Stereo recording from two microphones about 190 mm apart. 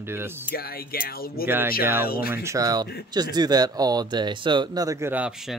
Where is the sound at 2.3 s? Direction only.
15° right (ahead or behind).